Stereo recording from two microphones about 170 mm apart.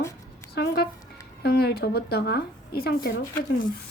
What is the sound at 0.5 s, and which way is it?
A woman's voice, 70° left (ahead or behind).